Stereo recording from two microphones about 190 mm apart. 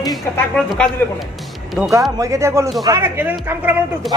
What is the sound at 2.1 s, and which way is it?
Speech, 15° right (ahead or behind).